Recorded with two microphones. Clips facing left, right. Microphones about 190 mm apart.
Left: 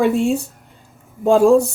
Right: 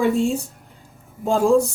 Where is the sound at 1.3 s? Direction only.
70° left (ahead or behind).